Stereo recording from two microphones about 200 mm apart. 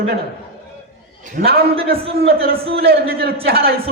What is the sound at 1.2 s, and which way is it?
A man's voice, 40° right (ahead or behind).